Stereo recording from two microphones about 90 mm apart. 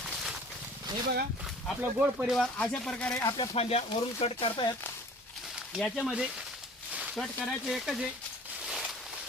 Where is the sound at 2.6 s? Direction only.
10° left (ahead or behind).